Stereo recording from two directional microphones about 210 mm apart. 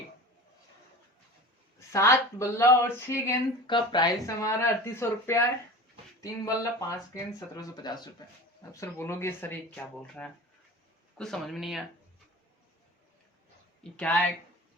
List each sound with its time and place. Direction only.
1.9 s speech: 15° left (ahead or behind)
13.8 s speech: 5° left (ahead or behind)